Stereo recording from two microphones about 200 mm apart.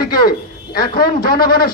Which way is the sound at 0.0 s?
50° left (ahead or behind).